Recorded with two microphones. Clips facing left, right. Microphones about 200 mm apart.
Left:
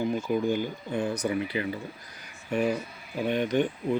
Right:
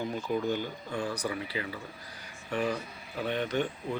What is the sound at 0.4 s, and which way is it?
Speech, 10° left (ahead or behind).